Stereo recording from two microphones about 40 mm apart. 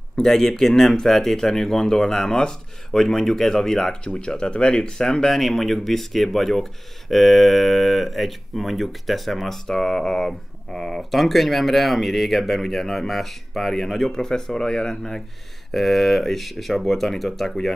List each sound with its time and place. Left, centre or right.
0.2 s speech: centre
9.7 s speech: centre
15.7 s speech: centre